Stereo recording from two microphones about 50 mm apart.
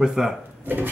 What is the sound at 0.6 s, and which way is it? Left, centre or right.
Speech, right.